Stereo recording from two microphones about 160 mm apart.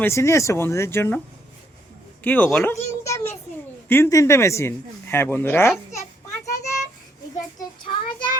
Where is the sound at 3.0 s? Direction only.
15° left (ahead or behind).